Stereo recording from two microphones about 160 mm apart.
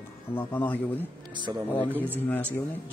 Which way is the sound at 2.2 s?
10° left (ahead or behind).